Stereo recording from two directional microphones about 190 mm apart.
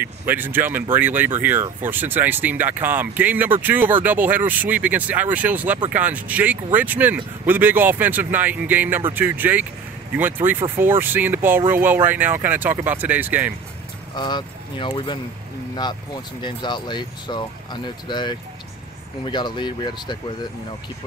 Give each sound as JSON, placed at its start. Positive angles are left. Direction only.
{"t": 0.0, "sound": "speech", "side_deg": -10}
{"t": 14.1, "sound": "speech", "side_deg": 25}